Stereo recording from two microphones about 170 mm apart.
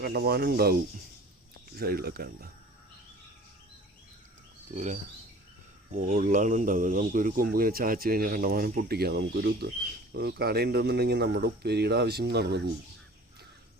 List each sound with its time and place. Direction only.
0.0 s speech: 70° right (ahead or behind)
4.7 s speech: 45° right (ahead or behind)
6.0 s speech: 50° right (ahead or behind); by 12.6 s 75° right (ahead or behind)